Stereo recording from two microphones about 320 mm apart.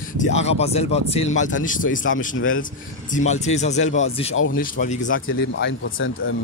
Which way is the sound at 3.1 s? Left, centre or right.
Left.